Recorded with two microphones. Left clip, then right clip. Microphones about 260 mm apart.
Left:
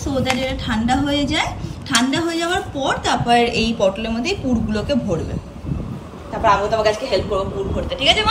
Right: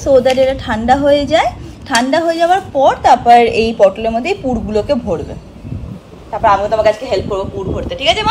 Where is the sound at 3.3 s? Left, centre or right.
Left.